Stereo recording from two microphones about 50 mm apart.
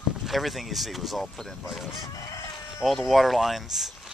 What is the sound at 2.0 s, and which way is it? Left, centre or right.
Chicken, left.